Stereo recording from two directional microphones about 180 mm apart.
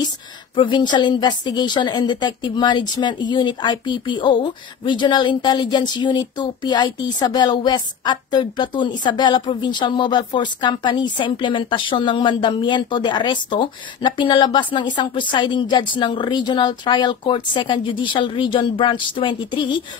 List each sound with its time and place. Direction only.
0.6 s a woman's voice: 25° left (ahead or behind)